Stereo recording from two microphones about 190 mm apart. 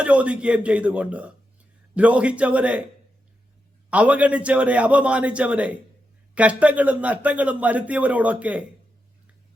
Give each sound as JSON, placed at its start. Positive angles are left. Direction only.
{"t": 0.0, "sound": "a man's voice", "side_deg": -5}
{"t": 3.8, "sound": "a man's voice", "side_deg": -5}